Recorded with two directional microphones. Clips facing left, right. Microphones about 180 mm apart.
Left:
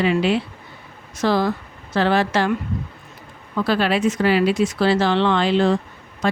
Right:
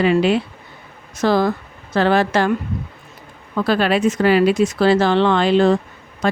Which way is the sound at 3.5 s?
50° right (ahead or behind).